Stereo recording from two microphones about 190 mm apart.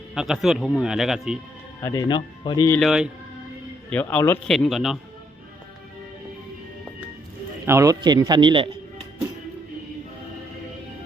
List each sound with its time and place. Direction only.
0.1 s speech: centre (ahead or behind)
1.8 s speech: 20° left (ahead or behind)
2.7 s speech: centre (ahead or behind)
3.8 s speech: 10° left (ahead or behind)
7.6 s a man's voice: 15° right (ahead or behind)